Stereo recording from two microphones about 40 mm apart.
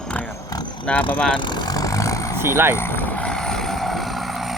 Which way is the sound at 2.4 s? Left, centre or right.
Right.